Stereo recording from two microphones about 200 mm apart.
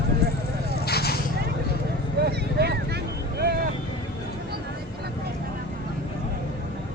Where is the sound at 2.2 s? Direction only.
55° right (ahead or behind).